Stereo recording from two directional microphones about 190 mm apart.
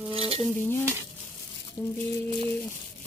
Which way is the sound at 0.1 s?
30° right (ahead or behind).